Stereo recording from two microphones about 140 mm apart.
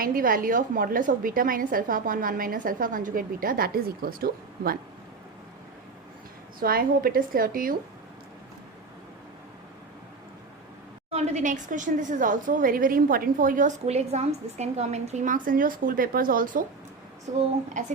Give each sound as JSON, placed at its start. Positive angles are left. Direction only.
{"t": 0.0, "sound": "a woman's voice", "side_deg": -85}
{"t": 6.6, "sound": "a woman's voice", "side_deg": -90}
{"t": 11.1, "sound": "a woman's voice", "side_deg": -55}
{"t": 13.8, "sound": "a woman's voice", "side_deg": -50}